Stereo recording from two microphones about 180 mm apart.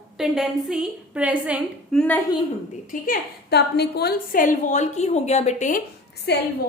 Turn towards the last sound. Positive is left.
turn(degrees=65)  # may be behind; listen again after turning